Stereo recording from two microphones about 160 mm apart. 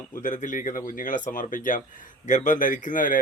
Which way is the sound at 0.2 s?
55° left (ahead or behind).